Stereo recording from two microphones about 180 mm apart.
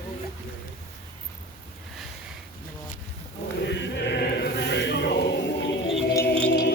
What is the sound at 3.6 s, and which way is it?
Chant, 70° left (ahead or behind).